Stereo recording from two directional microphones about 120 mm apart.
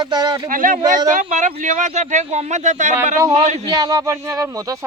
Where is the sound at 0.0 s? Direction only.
35° right (ahead or behind).